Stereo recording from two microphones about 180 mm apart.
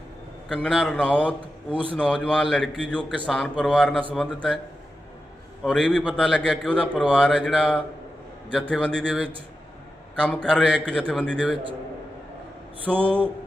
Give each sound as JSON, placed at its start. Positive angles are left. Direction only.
{"t": 0.4, "sound": "a man's voice", "side_deg": 5}
{"t": 5.6, "sound": "a man's voice", "side_deg": 5}
{"t": 12.9, "sound": "speech", "side_deg": 5}